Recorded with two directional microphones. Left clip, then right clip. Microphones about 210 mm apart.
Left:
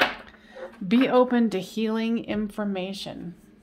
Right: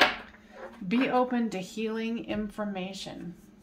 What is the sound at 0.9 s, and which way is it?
Speech, 55° left (ahead or behind).